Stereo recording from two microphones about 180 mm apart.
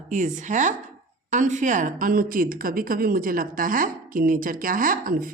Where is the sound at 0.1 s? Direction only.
45° right (ahead or behind).